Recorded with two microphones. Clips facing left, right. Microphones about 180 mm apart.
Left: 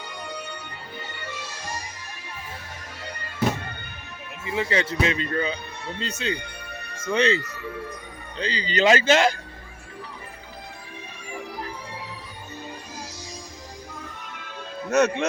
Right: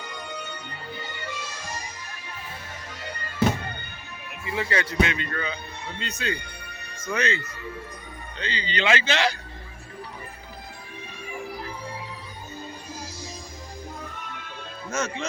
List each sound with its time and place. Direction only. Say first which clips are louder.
4.4 s speech: left 2 dB; 20° left (ahead or behind); by 9.3 s 45° left (ahead or behind)
14.8 s speech: left 9 dB; 70° left (ahead or behind)